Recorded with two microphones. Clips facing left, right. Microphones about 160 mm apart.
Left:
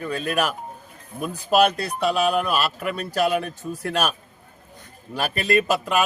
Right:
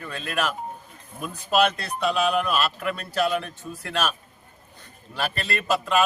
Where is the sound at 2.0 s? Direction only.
35° left (ahead or behind).